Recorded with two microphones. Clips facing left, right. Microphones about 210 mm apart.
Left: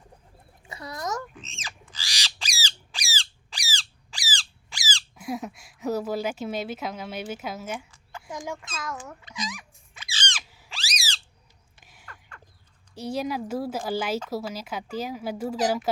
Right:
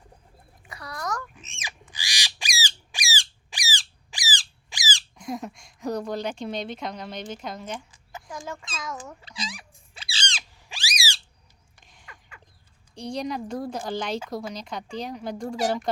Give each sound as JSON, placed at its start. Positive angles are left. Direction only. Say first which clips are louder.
{"t": 0.6, "sound": "chicken", "louder": "left 1 dB", "side_deg": 25}
{"t": 1.5, "sound": "squawk", "louder": "even", "side_deg": -15}
{"t": 5.1, "sound": "a woman's voice", "louder": "left 1 dB", "side_deg": 5}
{"t": 8.3, "sound": "speech", "louder": "left 2 dB", "side_deg": 20}
{"t": 8.7, "sound": "a woman's voice", "louder": "even", "side_deg": 0}
{"t": 9.2, "sound": "squeak", "louder": "left 2 dB", "side_deg": -30}
{"t": 10.7, "sound": "a sound", "louder": "right 3 dB", "side_deg": -15}
{"t": 11.8, "sound": "a sound", "louder": "left 1 dB", "side_deg": 5}
{"t": 12.9, "sound": "a woman's voice", "louder": "left 1 dB", "side_deg": 5}